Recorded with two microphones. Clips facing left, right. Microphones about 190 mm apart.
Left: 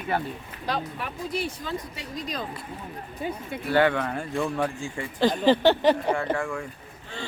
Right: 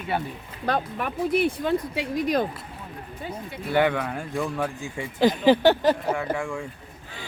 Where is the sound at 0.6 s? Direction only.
55° right (ahead or behind).